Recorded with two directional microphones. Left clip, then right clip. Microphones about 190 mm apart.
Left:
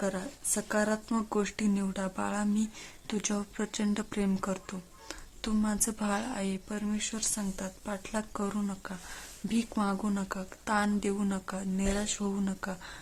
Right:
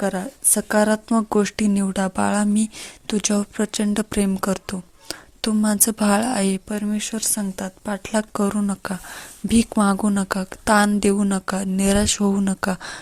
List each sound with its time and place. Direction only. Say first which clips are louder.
0.0 s speech: right 10 dB; 40° right (ahead or behind)